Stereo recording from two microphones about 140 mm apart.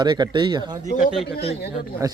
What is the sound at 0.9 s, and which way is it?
Speech, 70° left (ahead or behind).